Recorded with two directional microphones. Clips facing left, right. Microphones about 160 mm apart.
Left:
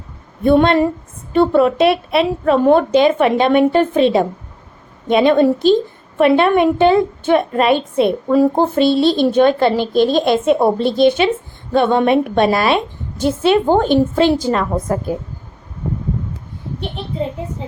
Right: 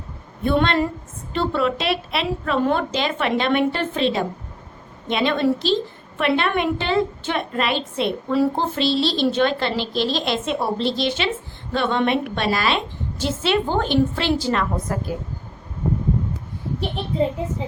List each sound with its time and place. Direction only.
0.4 s a woman's voice: 50° left (ahead or behind)